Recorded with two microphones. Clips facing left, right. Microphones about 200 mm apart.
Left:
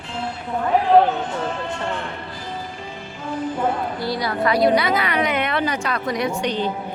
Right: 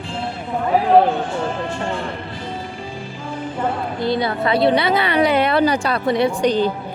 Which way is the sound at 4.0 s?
25° right (ahead or behind).